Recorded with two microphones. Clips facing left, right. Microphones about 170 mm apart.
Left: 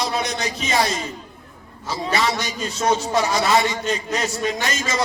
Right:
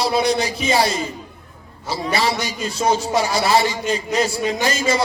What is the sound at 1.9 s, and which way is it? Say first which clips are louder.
A man's voice: right 1 dB; 35° right (ahead or behind).